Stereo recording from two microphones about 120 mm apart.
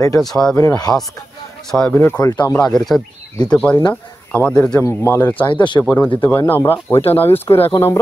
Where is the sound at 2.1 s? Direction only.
30° left (ahead or behind).